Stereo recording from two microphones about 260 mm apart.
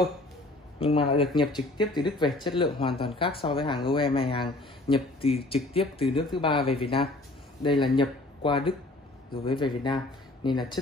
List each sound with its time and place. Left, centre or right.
0.7 s a man's voice: left